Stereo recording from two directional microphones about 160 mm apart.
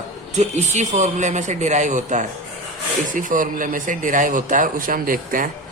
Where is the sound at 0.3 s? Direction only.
45° right (ahead or behind).